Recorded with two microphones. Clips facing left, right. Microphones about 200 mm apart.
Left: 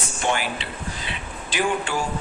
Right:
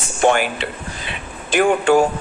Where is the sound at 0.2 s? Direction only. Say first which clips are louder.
Right 9 dB; 55° right (ahead or behind).